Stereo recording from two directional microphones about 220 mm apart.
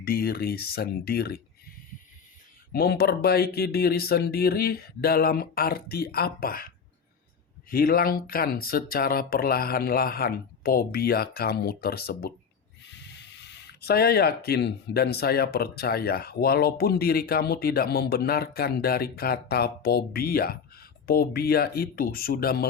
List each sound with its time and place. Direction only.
0.0 s speech: 45° left (ahead or behind)
2.7 s speech: 45° left (ahead or behind)
13.5 s speech: 50° left (ahead or behind)